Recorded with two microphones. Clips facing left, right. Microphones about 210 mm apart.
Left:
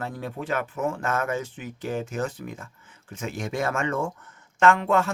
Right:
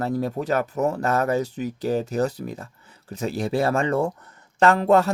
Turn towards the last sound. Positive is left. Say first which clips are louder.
# right 3 dB
turn(degrees=-35)  # may be behind; listen again after turning